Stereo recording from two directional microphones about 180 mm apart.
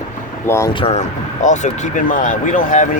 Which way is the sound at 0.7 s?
30° left (ahead or behind).